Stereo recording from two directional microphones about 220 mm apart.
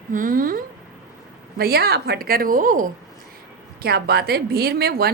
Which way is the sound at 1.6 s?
45° right (ahead or behind).